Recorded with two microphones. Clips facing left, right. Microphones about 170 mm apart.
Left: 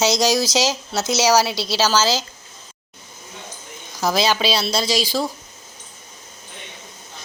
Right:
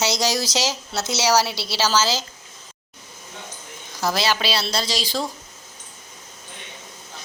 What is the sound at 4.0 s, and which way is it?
Speech, 15° left (ahead or behind).